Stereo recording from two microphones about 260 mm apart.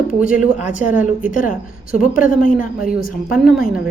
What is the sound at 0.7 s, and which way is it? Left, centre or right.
A woman's voice, left.